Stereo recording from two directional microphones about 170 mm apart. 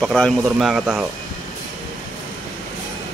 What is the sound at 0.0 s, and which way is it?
Speech, centre (ahead or behind).